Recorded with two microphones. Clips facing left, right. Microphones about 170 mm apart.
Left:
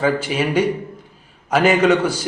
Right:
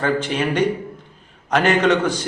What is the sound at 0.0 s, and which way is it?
A man's voice, 5° left (ahead or behind).